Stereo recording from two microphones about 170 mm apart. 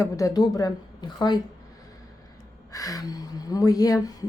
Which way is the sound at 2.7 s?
20° left (ahead or behind).